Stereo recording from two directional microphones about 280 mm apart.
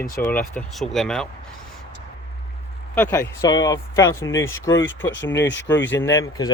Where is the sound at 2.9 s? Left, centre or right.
Centre.